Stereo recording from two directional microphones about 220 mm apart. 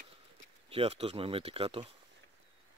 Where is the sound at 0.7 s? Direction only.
25° right (ahead or behind).